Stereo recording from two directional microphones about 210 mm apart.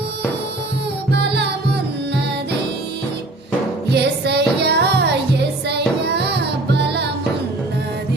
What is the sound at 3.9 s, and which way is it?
Music, 55° right (ahead or behind).